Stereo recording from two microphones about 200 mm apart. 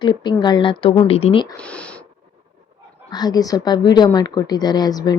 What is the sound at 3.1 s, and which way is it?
Speech, 20° left (ahead or behind).